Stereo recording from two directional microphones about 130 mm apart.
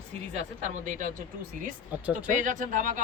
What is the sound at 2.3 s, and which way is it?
Speech, 80° right.